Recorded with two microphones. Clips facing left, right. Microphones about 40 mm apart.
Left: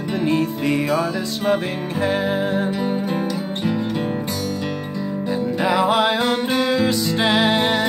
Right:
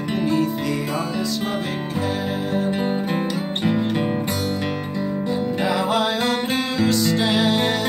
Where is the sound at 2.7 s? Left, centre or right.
Right.